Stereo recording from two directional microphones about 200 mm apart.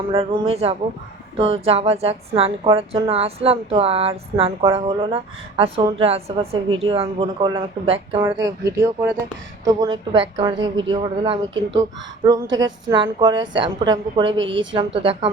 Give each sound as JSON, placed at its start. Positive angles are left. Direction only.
{"t": 0.1, "sound": "a woman's voice", "side_deg": -30}
{"t": 8.2, "sound": "a woman's voice", "side_deg": -15}
{"t": 14.3, "sound": "a woman's voice", "side_deg": -65}
{"t": 14.9, "sound": "a woman's voice", "side_deg": -30}